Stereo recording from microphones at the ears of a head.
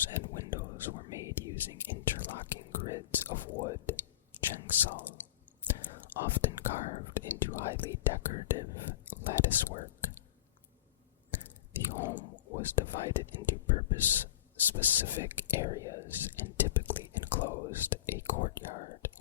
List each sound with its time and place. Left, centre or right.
0.0 s whispering: left
11.3 s whispering: left